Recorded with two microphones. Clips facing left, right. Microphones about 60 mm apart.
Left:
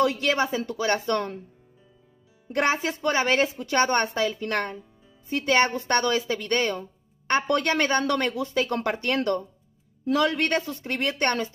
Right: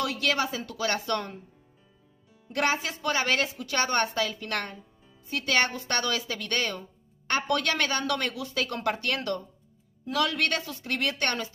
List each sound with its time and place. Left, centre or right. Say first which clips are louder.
0.0 s a woman's voice: left 5 dB; left
2.5 s a woman's voice: left 3 dB; left